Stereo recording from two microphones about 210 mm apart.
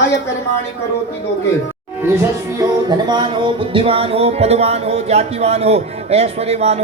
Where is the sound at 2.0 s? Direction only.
15° right (ahead or behind).